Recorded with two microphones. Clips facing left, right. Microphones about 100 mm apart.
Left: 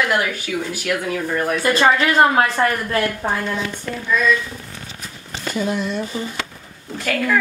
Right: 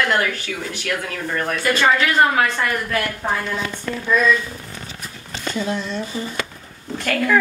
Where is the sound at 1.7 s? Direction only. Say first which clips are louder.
Left 1 dB; 30° left (ahead or behind).